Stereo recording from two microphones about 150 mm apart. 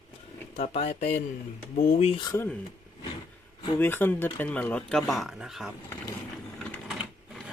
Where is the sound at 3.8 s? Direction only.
15° left (ahead or behind).